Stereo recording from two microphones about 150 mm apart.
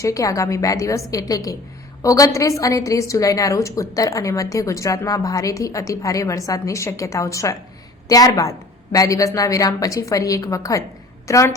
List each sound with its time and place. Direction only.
0.0 s a woman's voice: 20° left (ahead or behind)